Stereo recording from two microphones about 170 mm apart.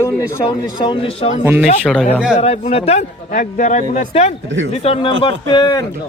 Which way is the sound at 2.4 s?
35° left (ahead or behind).